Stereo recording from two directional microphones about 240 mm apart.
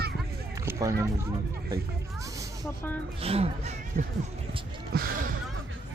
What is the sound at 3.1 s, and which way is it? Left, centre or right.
Speech, right.